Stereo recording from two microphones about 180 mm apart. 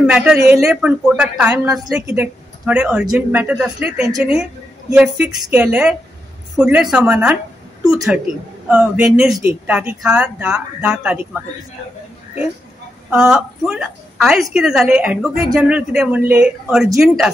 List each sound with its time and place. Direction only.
0.0 s a woman's voice: 5° right (ahead or behind)
8.6 s speech: 10° right (ahead or behind)
13.1 s a woman's voice: 5° right (ahead or behind)
15.3 s speech: 15° right (ahead or behind)
15.9 s a woman's voice: 5° right (ahead or behind)